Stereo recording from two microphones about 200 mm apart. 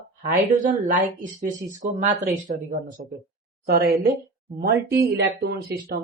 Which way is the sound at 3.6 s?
50° right (ahead or behind).